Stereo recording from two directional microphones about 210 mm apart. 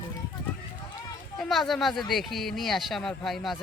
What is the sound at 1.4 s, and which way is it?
Speech, centre (ahead or behind).